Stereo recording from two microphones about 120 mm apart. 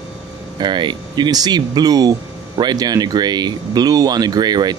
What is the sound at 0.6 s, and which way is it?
Speech, 40° right (ahead or behind).